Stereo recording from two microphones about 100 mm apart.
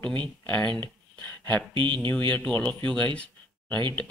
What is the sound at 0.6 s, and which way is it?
Speech, 50° right (ahead or behind).